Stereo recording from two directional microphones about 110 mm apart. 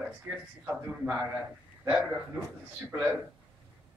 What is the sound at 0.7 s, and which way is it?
A man's voice, 10° right (ahead or behind).